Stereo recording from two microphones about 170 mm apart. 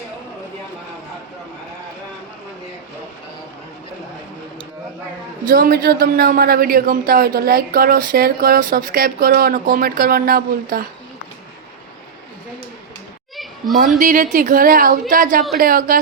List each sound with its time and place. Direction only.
5.5 s speech: 60° right (ahead or behind)
13.3 s children playing: centre (ahead or behind)
14.0 s speech: 50° right (ahead or behind)